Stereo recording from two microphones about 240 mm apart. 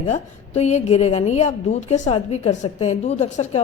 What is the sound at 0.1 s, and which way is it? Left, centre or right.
A woman's voice, left.